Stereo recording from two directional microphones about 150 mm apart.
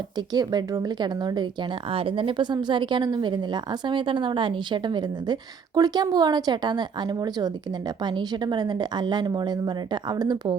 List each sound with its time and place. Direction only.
0.2 s a woman's voice: 25° right (ahead or behind)